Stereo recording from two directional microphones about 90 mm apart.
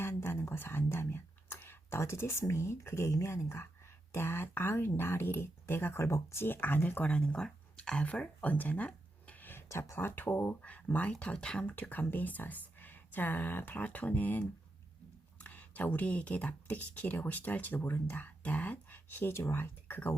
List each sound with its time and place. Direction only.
0.0 s a sound: 30° left (ahead or behind)
2.4 s speech: 30° left (ahead or behind)
15.4 s speech: 20° left (ahead or behind)